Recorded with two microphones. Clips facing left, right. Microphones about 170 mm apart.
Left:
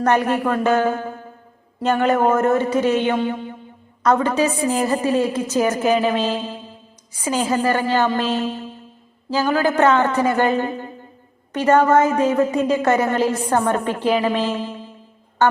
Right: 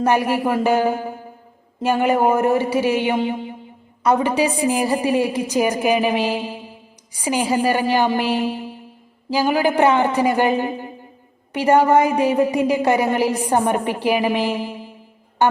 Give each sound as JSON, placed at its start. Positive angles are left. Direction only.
{"t": 0.0, "sound": "a woman's voice", "side_deg": -10}
{"t": 3.2, "sound": "a sound", "side_deg": -15}
{"t": 4.0, "sound": "a woman's voice", "side_deg": -10}
{"t": 15.4, "sound": "music", "side_deg": -15}